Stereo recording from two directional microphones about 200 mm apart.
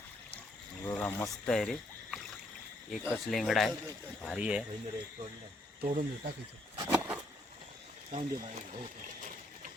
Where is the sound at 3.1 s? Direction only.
Centre (ahead or behind).